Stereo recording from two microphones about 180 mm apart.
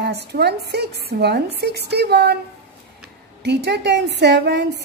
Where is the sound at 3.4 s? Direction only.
70° right (ahead or behind).